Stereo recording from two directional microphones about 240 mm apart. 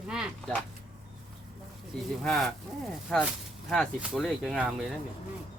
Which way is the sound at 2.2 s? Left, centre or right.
Centre.